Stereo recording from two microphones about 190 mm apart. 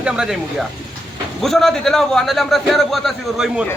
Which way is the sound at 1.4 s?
Centre (ahead or behind).